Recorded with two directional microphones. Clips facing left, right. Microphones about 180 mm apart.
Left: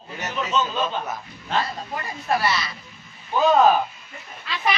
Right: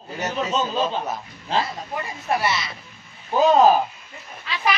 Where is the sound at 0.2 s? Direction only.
35° right (ahead or behind).